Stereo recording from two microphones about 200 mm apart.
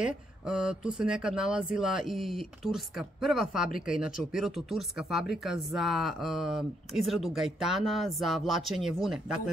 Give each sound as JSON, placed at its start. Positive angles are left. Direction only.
{"t": 0.0, "sound": "speech", "side_deg": -5}